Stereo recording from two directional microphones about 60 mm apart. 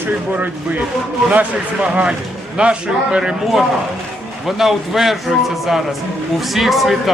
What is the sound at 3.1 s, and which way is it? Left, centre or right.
A man's voice, centre.